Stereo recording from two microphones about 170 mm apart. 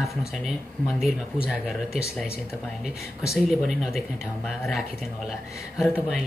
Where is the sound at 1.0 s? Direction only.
Centre (ahead or behind).